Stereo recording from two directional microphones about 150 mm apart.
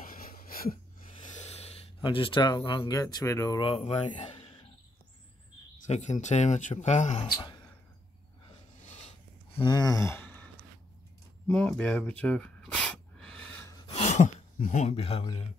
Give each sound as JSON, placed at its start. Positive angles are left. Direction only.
{"t": 0.0, "sound": "wheeze", "side_deg": 70}
{"t": 1.3, "sound": "snort", "side_deg": 45}
{"t": 2.0, "sound": "speech", "side_deg": 35}
{"t": 5.9, "sound": "speech", "side_deg": 50}
{"t": 9.6, "sound": "speech", "side_deg": 30}
{"t": 11.4, "sound": "gasp", "side_deg": 5}
{"t": 13.8, "sound": "a sound", "side_deg": 50}